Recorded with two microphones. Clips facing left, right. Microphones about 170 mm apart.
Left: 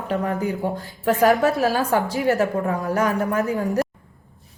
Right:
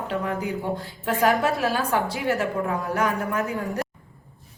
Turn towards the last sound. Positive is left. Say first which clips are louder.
# left 5 dB
turn(degrees=40)  # may be behind; listen again after turning